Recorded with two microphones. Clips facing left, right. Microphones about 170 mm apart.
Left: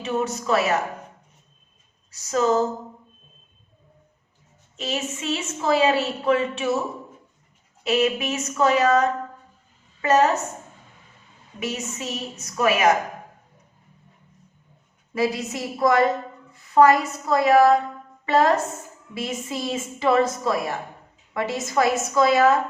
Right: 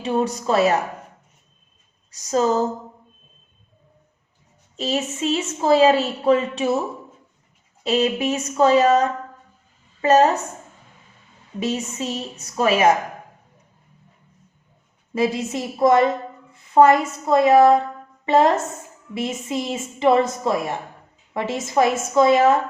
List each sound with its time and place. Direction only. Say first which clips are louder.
0.0 s a woman's voice: right 3 dB; 30° right (ahead or behind)
4.8 s a woman's voice: right 5 dB; 35° right (ahead or behind)
7.9 s a woman's voice: right 2 dB; 30° right (ahead or behind)
11.6 s a woman's voice: right 5 dB; 30° right (ahead or behind)
15.1 s a woman's voice: right 2 dB; 25° right (ahead or behind)